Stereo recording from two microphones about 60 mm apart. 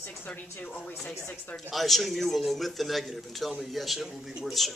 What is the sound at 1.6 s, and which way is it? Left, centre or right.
A man's voice, centre.